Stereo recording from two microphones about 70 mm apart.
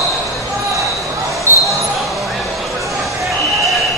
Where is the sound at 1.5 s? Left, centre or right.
Right.